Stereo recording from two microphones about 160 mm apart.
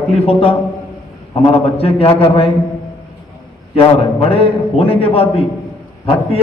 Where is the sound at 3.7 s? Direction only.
35° left (ahead or behind).